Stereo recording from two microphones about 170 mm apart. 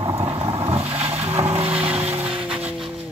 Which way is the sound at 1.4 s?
35° right (ahead or behind).